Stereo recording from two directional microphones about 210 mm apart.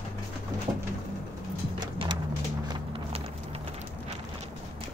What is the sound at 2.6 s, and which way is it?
Music, 25° right (ahead or behind).